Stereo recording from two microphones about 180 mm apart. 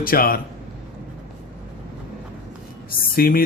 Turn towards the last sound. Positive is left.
turn(degrees=55)  # may be behind; listen again after turning